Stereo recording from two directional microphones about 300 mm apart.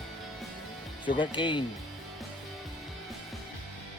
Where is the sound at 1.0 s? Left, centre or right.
Centre.